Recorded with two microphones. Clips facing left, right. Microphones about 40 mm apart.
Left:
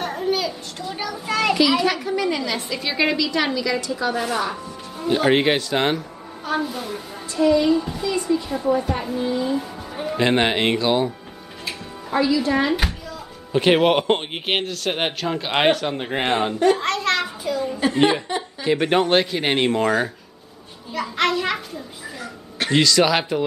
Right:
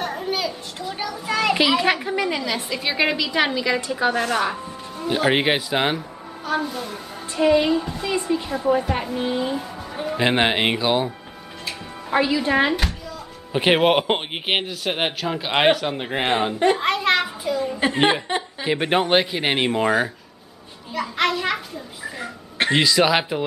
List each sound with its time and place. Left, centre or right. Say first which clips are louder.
0.0 s children playing: left 2 dB; centre
1.8 s speech: even; right
4.2 s speech: right 2 dB; centre
6.4 s a child's voice: even; centre
7.3 s a woman's voice: left 1 dB; right
9.6 s music: left 1 dB; centre
10.2 s speech: even; centre
12.1 s a woman's voice: even; right
13.5 s speech: left 1 dB; centre
16.7 s a sound: right 2 dB; centre
17.7 s a woman's voice: left 1 dB; right
18.6 s a child's voice: left 3 dB; centre
22.2 s speech: right 4 dB; right